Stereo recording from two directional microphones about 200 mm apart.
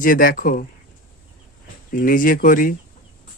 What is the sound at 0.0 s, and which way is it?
Speech, 45° left (ahead or behind).